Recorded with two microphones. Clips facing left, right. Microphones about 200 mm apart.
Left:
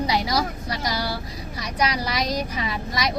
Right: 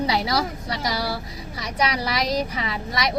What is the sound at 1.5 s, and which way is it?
Speech, 25° right (ahead or behind).